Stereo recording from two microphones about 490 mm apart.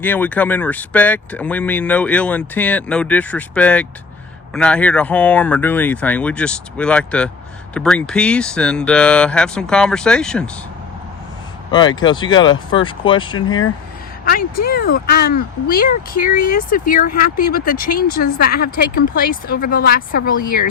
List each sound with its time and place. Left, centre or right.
0.0 s speech: centre
11.7 s a woman's voice: centre